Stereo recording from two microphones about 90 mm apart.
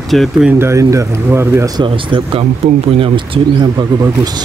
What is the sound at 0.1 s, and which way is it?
Speech, centre (ahead or behind).